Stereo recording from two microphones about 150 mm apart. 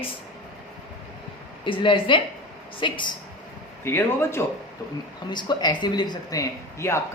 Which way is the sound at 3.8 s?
15° left (ahead or behind).